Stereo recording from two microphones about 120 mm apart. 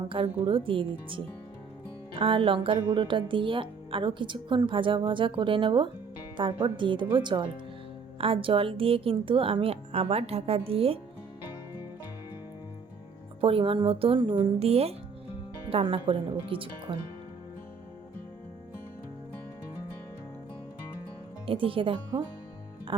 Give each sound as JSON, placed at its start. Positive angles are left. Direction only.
{"t": 0.4, "sound": "speech", "side_deg": -45}
{"t": 13.4, "sound": "a woman's voice", "side_deg": -50}
{"t": 21.4, "sound": "speech", "side_deg": -50}
{"t": 22.9, "sound": "music", "side_deg": -45}